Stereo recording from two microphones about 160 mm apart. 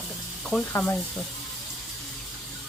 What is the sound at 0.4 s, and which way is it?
Speech, 5° left (ahead or behind).